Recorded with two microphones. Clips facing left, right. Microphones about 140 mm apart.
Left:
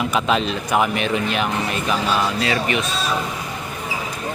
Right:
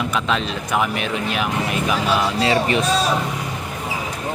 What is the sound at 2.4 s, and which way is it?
Speech, 30° right (ahead or behind).